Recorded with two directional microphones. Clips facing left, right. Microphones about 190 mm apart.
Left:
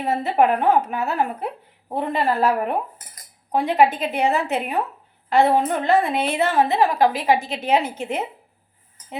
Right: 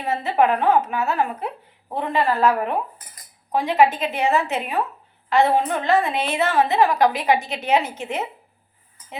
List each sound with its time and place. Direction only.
0.0 s a woman's voice: 40° left (ahead or behind)